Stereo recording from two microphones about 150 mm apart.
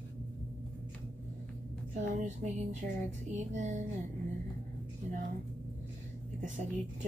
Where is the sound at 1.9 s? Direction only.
55° right (ahead or behind).